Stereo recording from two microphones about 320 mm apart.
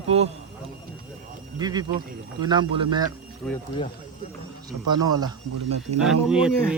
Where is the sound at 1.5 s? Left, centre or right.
Centre.